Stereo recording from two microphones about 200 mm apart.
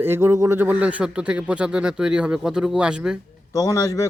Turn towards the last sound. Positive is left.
turn(degrees=15)  # may be behind; listen again after turning